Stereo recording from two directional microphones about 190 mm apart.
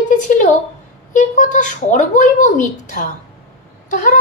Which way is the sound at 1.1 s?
40° left (ahead or behind).